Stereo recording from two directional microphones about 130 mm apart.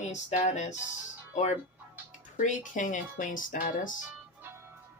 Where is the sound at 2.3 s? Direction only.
75° left (ahead or behind).